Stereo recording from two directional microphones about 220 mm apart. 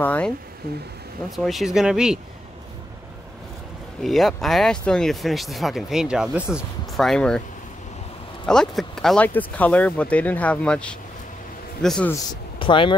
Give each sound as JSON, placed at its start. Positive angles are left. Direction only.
{"t": 0.0, "sound": "speech", "side_deg": 5}
{"t": 1.3, "sound": "speech", "side_deg": 0}
{"t": 4.0, "sound": "speech", "side_deg": 0}
{"t": 8.5, "sound": "speech", "side_deg": 5}
{"t": 12.5, "sound": "speech", "side_deg": 20}